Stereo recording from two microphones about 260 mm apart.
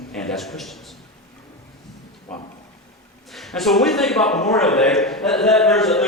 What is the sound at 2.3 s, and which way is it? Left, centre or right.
A man's voice, centre.